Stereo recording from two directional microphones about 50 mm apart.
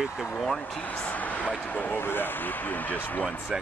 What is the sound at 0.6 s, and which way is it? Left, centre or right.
Speech, left.